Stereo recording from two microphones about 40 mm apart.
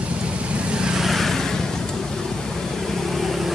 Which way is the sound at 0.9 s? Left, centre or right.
Centre.